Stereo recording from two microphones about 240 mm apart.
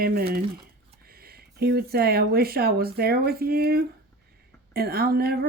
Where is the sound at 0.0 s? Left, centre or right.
Right.